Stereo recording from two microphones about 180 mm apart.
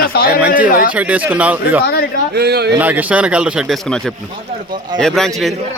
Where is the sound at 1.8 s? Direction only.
60° left (ahead or behind).